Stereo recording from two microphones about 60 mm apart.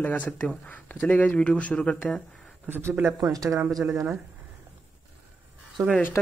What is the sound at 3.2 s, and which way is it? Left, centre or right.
Speech, right.